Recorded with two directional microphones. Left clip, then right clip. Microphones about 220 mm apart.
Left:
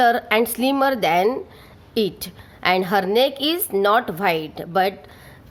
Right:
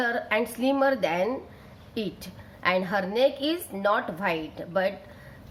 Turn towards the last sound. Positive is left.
turn(degrees=50)  # may be behind; listen again after turning